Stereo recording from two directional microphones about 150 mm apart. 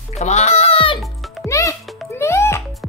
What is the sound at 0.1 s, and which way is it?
Music, 45° left (ahead or behind).